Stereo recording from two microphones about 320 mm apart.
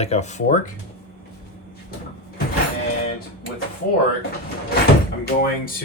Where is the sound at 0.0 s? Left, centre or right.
Left.